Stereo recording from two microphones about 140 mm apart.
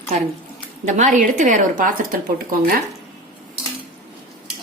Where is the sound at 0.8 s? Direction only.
60° right (ahead or behind).